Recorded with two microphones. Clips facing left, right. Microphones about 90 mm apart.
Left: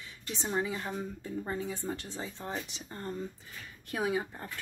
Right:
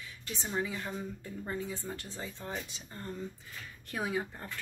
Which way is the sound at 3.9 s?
20° left (ahead or behind).